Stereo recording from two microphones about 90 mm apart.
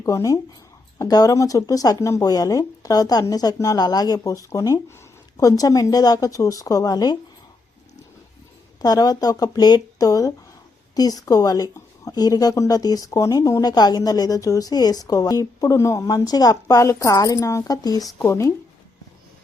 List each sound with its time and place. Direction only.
0.0 s a woman's voice: 35° left (ahead or behind)
8.8 s a woman's voice: 45° left (ahead or behind)